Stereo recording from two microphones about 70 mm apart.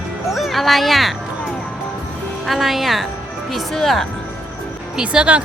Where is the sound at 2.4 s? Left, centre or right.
Centre.